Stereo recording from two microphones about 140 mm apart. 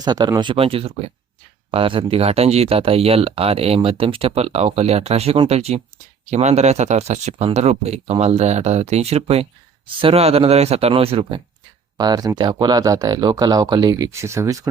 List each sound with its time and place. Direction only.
0.0 s speech: 30° right (ahead or behind)
11.9 s speech: 30° right (ahead or behind)